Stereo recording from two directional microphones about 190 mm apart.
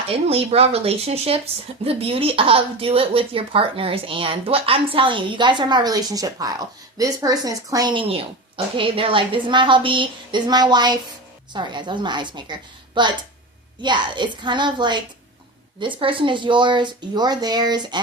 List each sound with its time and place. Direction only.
0.1 s speech: 30° right (ahead or behind)